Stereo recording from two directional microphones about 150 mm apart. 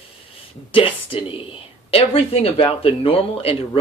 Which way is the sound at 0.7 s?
35° left (ahead or behind).